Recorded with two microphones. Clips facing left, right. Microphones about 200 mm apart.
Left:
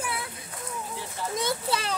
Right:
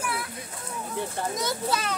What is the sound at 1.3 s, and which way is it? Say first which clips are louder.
Speech: left 2 dB; 30° left (ahead or behind).